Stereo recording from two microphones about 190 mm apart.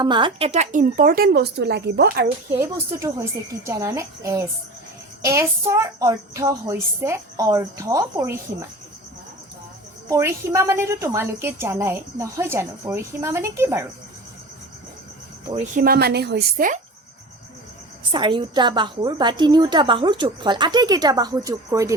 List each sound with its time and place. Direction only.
0.0 s speech: 25° right (ahead or behind); by 2.2 s 60° right (ahead or behind)
2.5 s a woman's voice: 15° right (ahead or behind)
10.1 s a woman's voice: 15° right (ahead or behind)
15.5 s speech: 45° right (ahead or behind)
18.1 s a woman's voice: 25° right (ahead or behind)